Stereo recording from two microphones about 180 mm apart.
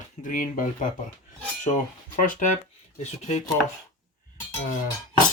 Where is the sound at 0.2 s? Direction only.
45° left (ahead or behind).